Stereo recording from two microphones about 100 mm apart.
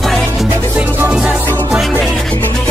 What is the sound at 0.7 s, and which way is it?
Music, 10° right (ahead or behind).